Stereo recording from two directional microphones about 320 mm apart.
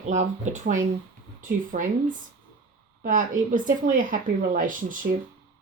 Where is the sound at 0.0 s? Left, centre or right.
Right.